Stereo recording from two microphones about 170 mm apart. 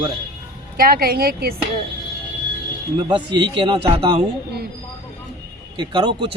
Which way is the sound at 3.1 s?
30° right (ahead or behind).